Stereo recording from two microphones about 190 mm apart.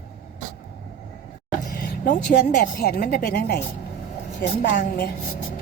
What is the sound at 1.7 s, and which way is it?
Vehicle, 45° left (ahead or behind).